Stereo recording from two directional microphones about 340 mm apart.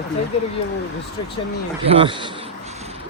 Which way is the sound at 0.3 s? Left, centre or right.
Centre.